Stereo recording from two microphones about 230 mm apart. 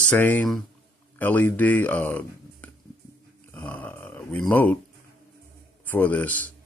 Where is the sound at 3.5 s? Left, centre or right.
Centre.